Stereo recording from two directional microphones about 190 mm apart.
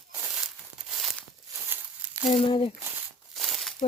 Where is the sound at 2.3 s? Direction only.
30° left (ahead or behind).